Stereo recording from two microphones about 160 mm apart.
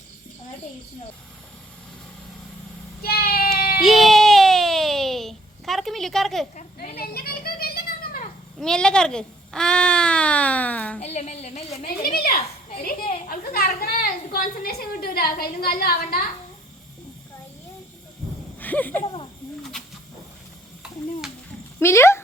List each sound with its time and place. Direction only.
3.0 s child singing: 70° left (ahead or behind)
3.8 s a sound: centre (ahead or behind)
6.6 s a sound: 65° left (ahead or behind)
8.5 s speech: 5° left (ahead or behind)
11.0 s a woman's voice: 45° left (ahead or behind)
11.9 s a child's voice: 65° left (ahead or behind)
18.6 s speech: 10° left (ahead or behind)
19.0 s a sound: 35° left (ahead or behind)
21.8 s speech: 15° left (ahead or behind)